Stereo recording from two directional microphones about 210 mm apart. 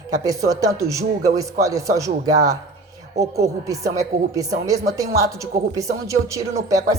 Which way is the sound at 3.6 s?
15° right (ahead or behind).